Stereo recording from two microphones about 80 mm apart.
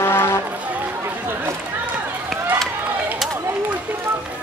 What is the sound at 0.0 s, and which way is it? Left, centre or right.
Music, left.